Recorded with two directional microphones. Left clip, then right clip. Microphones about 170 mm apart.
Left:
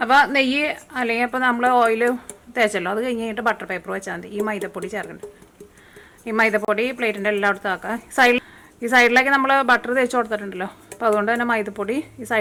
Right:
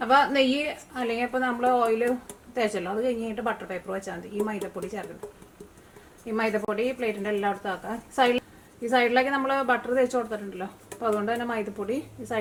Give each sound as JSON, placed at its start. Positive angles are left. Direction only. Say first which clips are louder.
{"t": 0.0, "sound": "a woman's voice", "louder": "left 5 dB", "side_deg": 25}
{"t": 6.2, "sound": "a woman's voice", "louder": "left 8 dB", "side_deg": 25}